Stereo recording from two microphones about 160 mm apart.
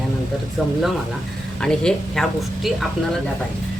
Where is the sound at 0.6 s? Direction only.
Centre (ahead or behind).